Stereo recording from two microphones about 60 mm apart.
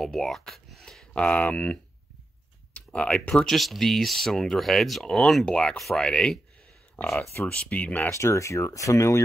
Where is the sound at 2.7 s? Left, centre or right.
Centre.